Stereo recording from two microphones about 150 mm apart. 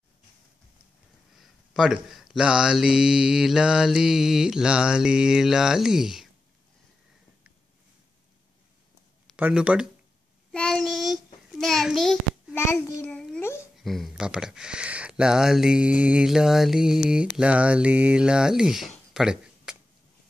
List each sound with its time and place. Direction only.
1.4 s speech: centre (ahead or behind)
9.4 s speech: 5° right (ahead or behind)
10.5 s a sound: 5° left (ahead or behind)
12.5 s child singing: 20° left (ahead or behind)
13.0 s a sound: 5° left (ahead or behind)
13.8 s speech: centre (ahead or behind)
17.1 s mantra: 5° right (ahead or behind)